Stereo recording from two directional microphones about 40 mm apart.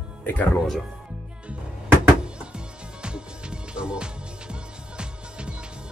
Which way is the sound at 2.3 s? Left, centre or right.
Right.